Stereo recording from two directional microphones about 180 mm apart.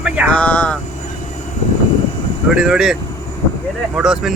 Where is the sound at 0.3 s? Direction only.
5° left (ahead or behind).